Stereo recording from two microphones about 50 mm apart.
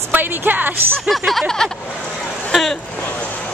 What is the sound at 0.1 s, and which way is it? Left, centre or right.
Speech, right.